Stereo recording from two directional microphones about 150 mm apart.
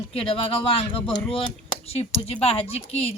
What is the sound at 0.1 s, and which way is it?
Speech, 40° left (ahead or behind).